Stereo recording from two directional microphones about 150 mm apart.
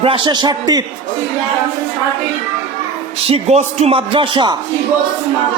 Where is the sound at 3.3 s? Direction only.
45° right (ahead or behind).